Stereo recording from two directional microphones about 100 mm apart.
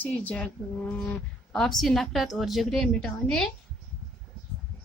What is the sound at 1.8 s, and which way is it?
A woman's voice, centre (ahead or behind).